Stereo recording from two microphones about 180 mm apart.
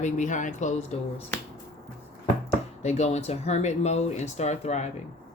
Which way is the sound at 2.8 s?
40° left (ahead or behind).